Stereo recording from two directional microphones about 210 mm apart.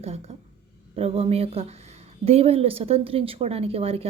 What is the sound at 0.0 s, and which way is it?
A woman's voice, 30° right (ahead or behind).